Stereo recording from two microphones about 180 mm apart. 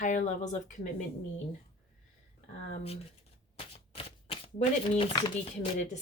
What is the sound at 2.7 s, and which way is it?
Speech, 35° left (ahead or behind).